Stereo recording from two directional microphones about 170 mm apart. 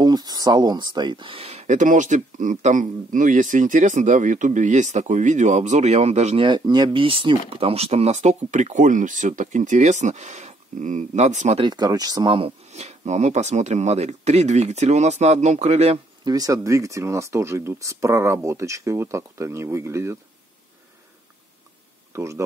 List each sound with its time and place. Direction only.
0.0 s speech: 25° right (ahead or behind); by 6.4 s 40° right (ahead or behind)
6.4 s speech: 25° right (ahead or behind); by 11.6 s 45° right (ahead or behind)
11.6 s speech: 25° right (ahead or behind)
16.3 s speech: 20° right (ahead or behind)
22.1 s speech: 15° right (ahead or behind)